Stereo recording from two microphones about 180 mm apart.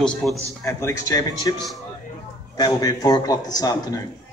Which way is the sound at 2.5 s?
20° left (ahead or behind).